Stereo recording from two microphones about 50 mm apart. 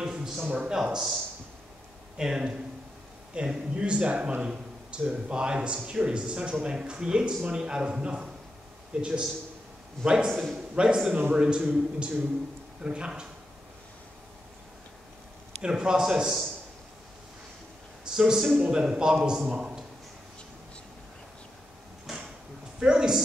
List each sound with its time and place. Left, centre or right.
0.0 s a sound: centre
0.5 s speech: right
0.8 s speech: centre
2.1 s speech: centre
3.7 s speech: right
10.7 s a man's voice: right
15.6 s speech: centre
18.0 s a man's voice: centre
19.5 s a sound: centre
22.1 s drawer open or close: centre
22.8 s speech: centre